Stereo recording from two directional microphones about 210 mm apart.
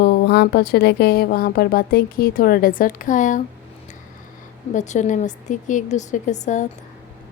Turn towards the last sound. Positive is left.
turn(degrees=35)  # may be behind; listen again after turning